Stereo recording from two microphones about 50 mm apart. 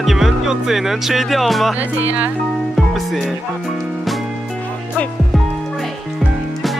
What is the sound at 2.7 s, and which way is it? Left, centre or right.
Music, centre.